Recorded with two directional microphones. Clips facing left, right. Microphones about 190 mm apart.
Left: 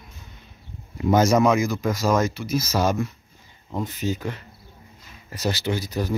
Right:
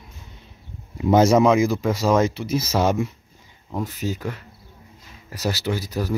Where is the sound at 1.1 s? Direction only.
25° right (ahead or behind).